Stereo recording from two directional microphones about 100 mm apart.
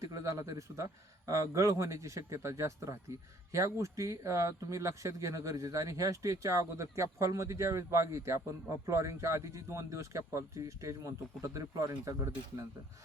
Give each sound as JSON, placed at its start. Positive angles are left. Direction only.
{"t": 0.0, "sound": "speech", "side_deg": -30}